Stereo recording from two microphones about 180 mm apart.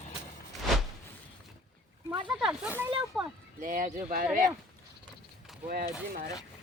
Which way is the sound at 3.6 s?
50° right (ahead or behind).